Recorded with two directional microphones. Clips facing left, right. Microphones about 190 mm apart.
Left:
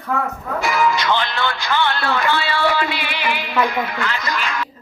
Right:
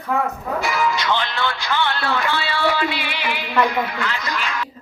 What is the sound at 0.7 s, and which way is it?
Music, 50° left (ahead or behind).